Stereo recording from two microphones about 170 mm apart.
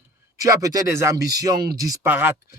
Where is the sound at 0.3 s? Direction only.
20° right (ahead or behind).